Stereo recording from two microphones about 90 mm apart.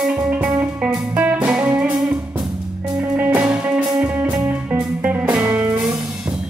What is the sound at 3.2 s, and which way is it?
Music, 20° right (ahead or behind).